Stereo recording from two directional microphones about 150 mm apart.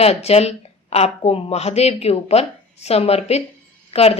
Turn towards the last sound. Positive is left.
turn(degrees=40)  # may be behind; listen again after turning